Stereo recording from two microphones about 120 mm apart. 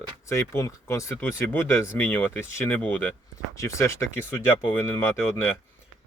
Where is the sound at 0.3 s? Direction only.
25° left (ahead or behind).